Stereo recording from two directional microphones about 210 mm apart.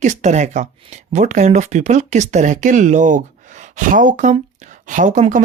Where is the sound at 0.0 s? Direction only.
35° right (ahead or behind).